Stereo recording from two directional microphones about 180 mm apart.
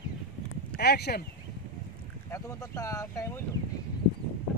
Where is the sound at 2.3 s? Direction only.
20° left (ahead or behind).